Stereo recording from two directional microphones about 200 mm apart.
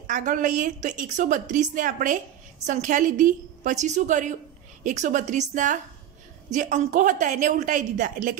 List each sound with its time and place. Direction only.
0.0 s a woman's voice: 40° right (ahead or behind)